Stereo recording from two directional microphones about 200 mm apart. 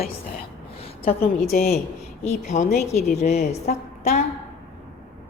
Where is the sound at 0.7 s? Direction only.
30° left (ahead or behind).